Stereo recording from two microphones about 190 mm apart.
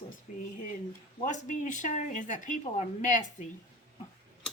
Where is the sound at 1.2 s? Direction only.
40° left (ahead or behind).